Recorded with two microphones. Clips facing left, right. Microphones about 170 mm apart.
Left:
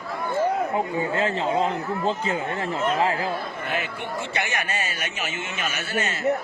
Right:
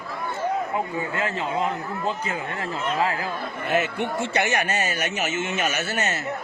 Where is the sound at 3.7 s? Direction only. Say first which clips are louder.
Right 7 dB; 45° right (ahead or behind).